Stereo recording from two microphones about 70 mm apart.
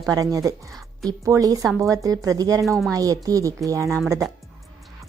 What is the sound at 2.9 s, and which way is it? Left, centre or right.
A woman's voice, right.